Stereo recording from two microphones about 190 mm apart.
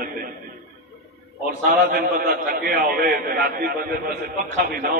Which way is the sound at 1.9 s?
50° right (ahead or behind).